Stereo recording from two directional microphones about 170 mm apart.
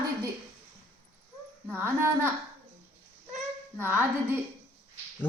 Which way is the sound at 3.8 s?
10° right (ahead or behind).